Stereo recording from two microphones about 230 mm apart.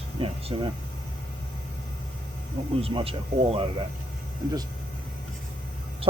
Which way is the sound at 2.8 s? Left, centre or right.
Right.